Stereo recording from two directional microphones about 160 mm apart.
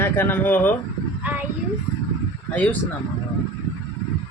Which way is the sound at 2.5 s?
10° left (ahead or behind).